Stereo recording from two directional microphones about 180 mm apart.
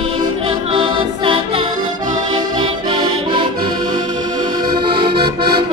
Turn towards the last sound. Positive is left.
turn(degrees=-30)  # may be behind; listen again after turning